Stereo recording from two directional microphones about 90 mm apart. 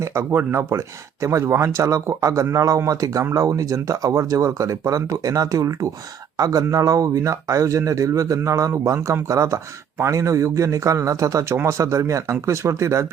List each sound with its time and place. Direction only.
0.0 s speech: 30° right (ahead or behind)